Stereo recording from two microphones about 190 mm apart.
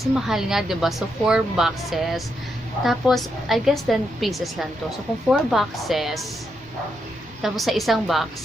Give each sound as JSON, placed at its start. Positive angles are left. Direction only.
{"t": 0.1, "sound": "a woman's voice", "side_deg": 0}
{"t": 7.4, "sound": "a woman's voice", "side_deg": 0}